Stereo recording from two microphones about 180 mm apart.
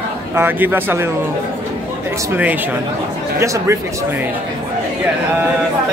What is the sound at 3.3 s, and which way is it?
Speech, 15° right (ahead or behind).